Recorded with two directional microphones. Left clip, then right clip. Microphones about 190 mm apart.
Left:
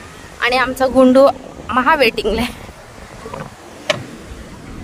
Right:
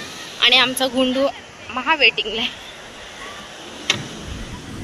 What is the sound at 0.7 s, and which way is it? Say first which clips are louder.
Speech: left 9 dB; 50° left (ahead or behind).